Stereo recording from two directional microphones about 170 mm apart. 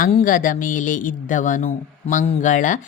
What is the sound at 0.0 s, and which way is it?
Speech, 45° left (ahead or behind).